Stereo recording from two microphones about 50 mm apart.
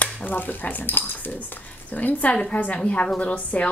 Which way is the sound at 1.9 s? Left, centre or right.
Left.